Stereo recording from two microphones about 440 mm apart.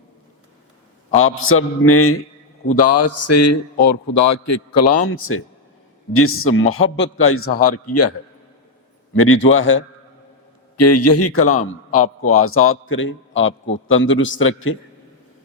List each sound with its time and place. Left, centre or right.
1.1 s a man's voice: left
6.1 s a man's voice: left
9.1 s a man's voice: left